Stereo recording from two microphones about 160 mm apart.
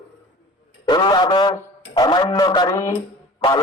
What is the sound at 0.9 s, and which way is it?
A man's voice, 30° left (ahead or behind).